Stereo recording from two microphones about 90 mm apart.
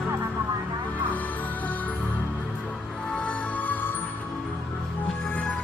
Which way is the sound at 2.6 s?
5° left (ahead or behind).